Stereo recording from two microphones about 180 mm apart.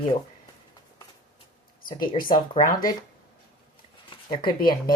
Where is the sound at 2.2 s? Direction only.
50° left (ahead or behind).